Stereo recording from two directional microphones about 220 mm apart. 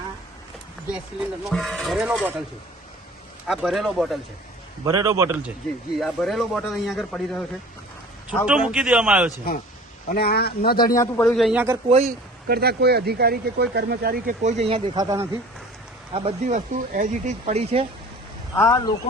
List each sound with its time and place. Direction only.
0.9 s speech: 5° right (ahead or behind)
3.4 s speech: centre (ahead or behind)
4.9 s a man's voice: 15° right (ahead or behind)
6.0 s speech: centre (ahead or behind)
8.4 s speech: 5° right (ahead or behind)
10.1 s speech: 45° left (ahead or behind)
10.9 s speech: 10° left (ahead or behind)
11.9 s speech: 30° right (ahead or behind)
12.5 s speech: 45° right (ahead or behind); by 15.3 s 15° right (ahead or behind)
16.1 s speech: 30° right (ahead or behind)
18.5 s speech: 15° left (ahead or behind)